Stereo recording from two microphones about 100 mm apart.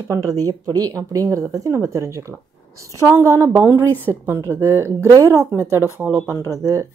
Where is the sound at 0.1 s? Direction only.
35° right (ahead or behind).